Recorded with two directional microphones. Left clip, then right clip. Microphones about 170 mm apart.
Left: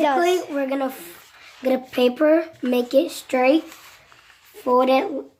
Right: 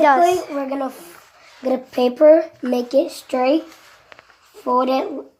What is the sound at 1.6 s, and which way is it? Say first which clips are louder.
Speech: right 1 dB; 5° left (ahead or behind).